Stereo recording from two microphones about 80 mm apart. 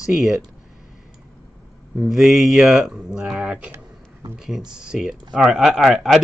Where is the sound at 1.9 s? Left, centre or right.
Centre.